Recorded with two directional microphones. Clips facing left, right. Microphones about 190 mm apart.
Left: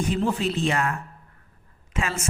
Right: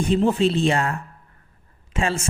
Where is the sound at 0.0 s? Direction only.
25° right (ahead or behind).